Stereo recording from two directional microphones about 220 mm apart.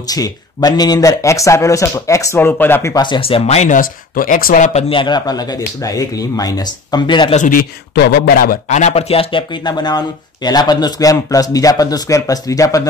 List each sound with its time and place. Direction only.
0.0 s speech: 15° left (ahead or behind)
7.4 s speech: 45° left (ahead or behind); by 12.8 s 15° left (ahead or behind)